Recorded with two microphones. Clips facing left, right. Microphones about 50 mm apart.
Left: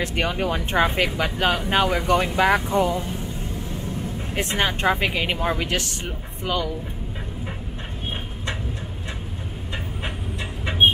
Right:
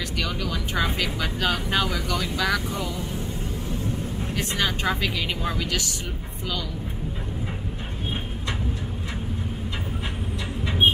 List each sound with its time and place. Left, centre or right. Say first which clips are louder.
0.0 s speech: left 5 dB; left
4.4 s speech: left 4 dB; left